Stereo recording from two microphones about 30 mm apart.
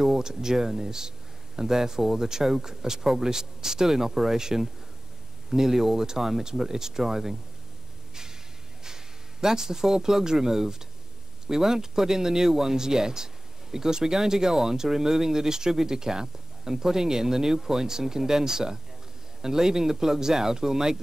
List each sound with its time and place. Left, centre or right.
0.0 s speech: centre
8.1 s a sound: centre
8.8 s speech: centre